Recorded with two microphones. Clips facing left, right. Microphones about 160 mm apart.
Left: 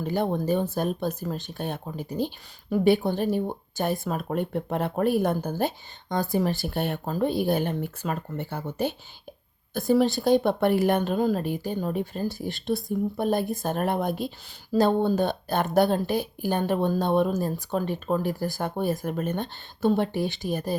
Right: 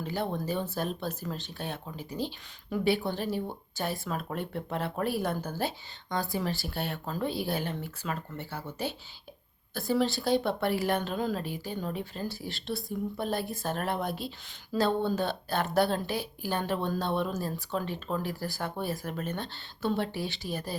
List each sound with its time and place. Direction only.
0.0 s speech: 50° left (ahead or behind)